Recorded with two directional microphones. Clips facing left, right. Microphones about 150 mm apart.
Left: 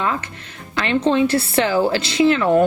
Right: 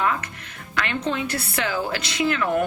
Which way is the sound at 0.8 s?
30° left (ahead or behind).